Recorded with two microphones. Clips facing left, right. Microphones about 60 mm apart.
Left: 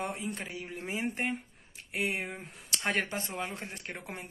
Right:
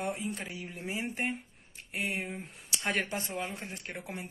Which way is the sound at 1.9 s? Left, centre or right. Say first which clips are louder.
Left 2 dB; left.